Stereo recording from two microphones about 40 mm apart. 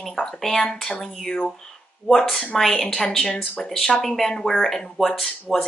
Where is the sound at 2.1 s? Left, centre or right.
Centre.